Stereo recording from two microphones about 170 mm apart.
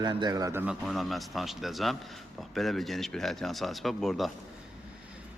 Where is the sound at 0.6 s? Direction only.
Centre (ahead or behind).